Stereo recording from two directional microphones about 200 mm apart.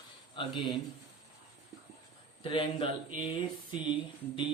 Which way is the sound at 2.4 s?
25° left (ahead or behind).